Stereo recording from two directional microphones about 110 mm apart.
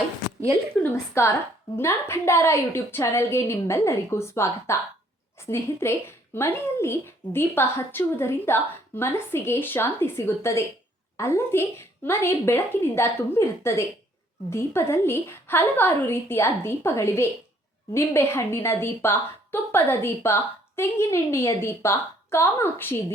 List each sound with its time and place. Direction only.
1.2 s a woman's voice: 25° left (ahead or behind)